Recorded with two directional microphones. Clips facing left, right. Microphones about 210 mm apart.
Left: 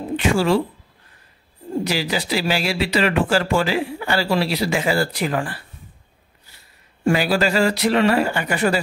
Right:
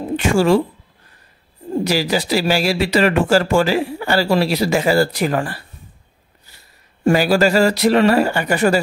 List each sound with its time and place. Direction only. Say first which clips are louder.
0.1 s speech: right 4 dB; 45° right (ahead or behind)
1.9 s speech: right 6 dB; 40° right (ahead or behind)
7.1 s speech: right 4 dB; 40° right (ahead or behind)